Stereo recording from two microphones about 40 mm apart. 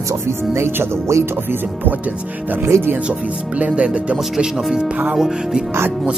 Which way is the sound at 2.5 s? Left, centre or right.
Right.